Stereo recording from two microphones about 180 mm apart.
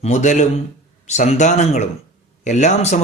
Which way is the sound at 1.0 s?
40° left (ahead or behind).